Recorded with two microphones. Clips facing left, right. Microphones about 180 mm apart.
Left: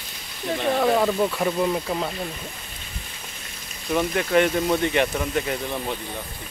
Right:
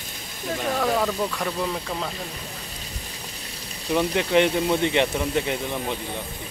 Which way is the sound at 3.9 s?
15° right (ahead or behind).